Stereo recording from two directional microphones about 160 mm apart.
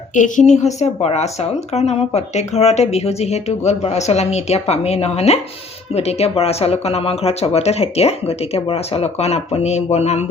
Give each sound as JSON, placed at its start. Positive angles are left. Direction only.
{"t": 0.1, "sound": "a woman's voice", "side_deg": 50}